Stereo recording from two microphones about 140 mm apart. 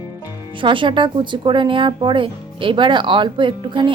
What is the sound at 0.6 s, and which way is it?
Speech, 35° right (ahead or behind).